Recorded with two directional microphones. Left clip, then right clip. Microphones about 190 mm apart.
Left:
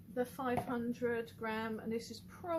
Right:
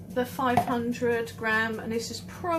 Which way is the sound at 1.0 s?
40° left (ahead or behind).